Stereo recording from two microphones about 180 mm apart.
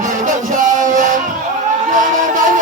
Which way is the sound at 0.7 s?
45° right (ahead or behind).